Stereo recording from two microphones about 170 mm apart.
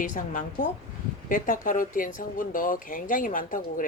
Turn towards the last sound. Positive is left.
turn(degrees=50)  # may be behind; listen again after turning